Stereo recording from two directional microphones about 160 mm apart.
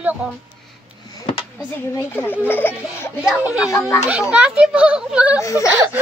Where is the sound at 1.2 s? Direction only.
35° left (ahead or behind).